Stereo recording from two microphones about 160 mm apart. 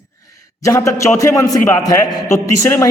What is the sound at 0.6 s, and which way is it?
A man's voice, 20° left (ahead or behind).